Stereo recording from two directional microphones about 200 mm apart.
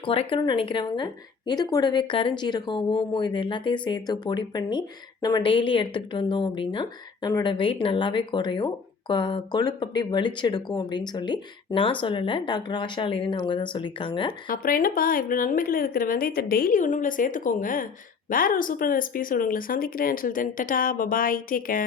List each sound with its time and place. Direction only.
0.0 s speech: 25° left (ahead or behind)
14.4 s speech: 45° left (ahead or behind)